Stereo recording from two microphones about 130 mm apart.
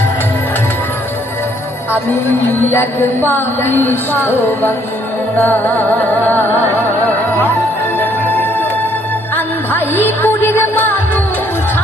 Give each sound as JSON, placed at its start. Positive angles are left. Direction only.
{"t": 1.9, "sound": "music", "side_deg": 15}
{"t": 7.9, "sound": "music", "side_deg": 15}